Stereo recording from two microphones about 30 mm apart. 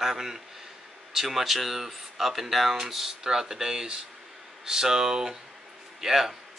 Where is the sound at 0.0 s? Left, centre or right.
Centre.